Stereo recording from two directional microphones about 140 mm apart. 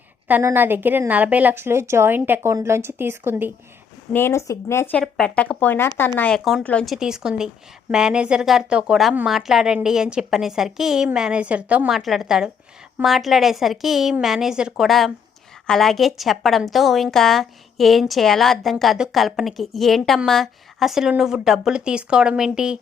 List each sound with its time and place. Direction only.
0.3 s a woman's voice: 15° right (ahead or behind)
4.1 s speech: 20° left (ahead or behind)
6.9 s a woman's voice: 5° right (ahead or behind)